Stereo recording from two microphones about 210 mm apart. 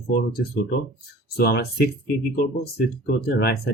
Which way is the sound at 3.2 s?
50° left (ahead or behind).